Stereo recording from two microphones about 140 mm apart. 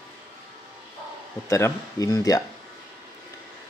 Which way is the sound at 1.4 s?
20° left (ahead or behind).